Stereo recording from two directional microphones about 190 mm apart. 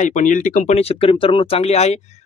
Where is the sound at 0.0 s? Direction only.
40° left (ahead or behind).